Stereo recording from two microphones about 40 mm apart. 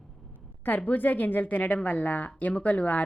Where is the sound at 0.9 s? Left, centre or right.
Left.